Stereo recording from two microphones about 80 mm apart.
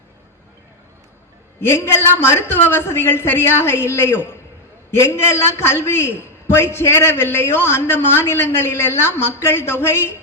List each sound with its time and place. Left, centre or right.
1.6 s a man's voice: left